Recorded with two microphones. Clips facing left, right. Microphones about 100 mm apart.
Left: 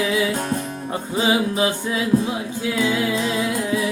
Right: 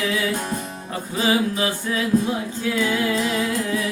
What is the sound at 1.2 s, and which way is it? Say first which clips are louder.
Music: left 1 dB; 20° left (ahead or behind).